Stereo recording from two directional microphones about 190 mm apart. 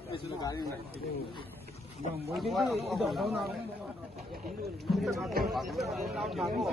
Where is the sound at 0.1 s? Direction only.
20° left (ahead or behind).